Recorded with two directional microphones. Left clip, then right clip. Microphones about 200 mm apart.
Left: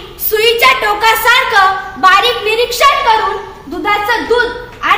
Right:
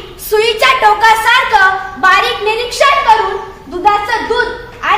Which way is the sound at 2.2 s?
10° right (ahead or behind).